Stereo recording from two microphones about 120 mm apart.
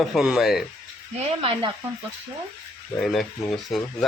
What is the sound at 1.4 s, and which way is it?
Speech, 50° right (ahead or behind).